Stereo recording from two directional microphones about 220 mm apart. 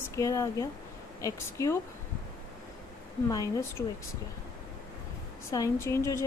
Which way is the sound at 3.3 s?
15° left (ahead or behind).